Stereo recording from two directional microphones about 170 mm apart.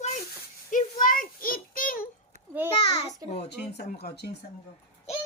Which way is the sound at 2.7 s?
30° left (ahead or behind).